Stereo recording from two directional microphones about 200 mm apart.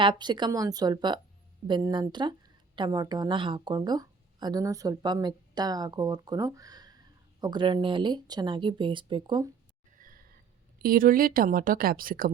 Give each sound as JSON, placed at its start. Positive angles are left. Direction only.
{"t": 0.0, "sound": "speech", "side_deg": -20}
{"t": 10.0, "sound": "a sound", "side_deg": -45}
{"t": 10.8, "sound": "a woman's voice", "side_deg": -45}